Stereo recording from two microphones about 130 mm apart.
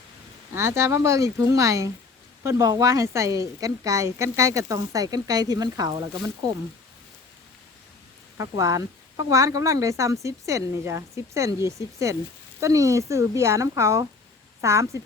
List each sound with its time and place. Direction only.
0.5 s a woman's voice: 20° right (ahead or behind)
8.4 s a woman's voice: 25° right (ahead or behind)